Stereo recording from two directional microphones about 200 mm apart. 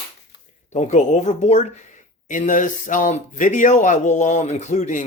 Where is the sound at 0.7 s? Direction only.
35° left (ahead or behind).